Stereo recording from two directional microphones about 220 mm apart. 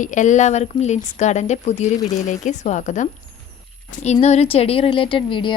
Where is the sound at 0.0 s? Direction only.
35° left (ahead or behind).